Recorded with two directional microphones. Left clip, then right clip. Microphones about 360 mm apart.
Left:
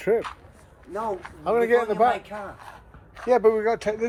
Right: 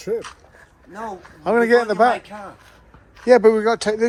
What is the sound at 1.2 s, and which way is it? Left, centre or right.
Speech, right.